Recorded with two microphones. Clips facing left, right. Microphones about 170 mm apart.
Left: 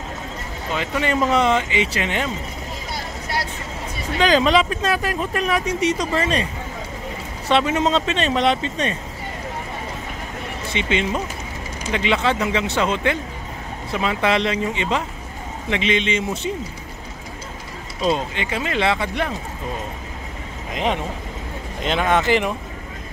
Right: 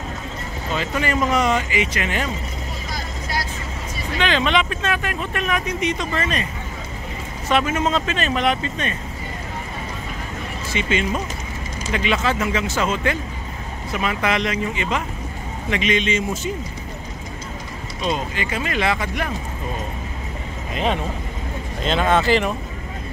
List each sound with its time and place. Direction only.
0.7 s speech: 20° left (ahead or behind)
4.2 s speech: 35° left (ahead or behind)
7.4 s speech: 25° left (ahead or behind)
10.7 s speech: 25° left (ahead or behind)
18.1 s speech: 20° left (ahead or behind)
20.7 s speech: 15° left (ahead or behind)